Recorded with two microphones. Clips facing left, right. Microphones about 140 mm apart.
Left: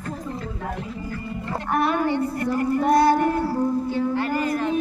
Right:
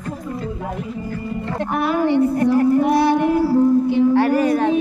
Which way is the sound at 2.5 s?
5° right (ahead or behind).